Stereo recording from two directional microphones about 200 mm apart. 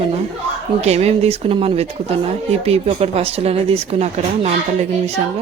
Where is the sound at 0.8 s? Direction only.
30° right (ahead or behind).